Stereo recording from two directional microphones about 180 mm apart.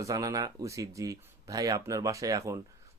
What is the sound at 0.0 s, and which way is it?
Speech, 20° right (ahead or behind).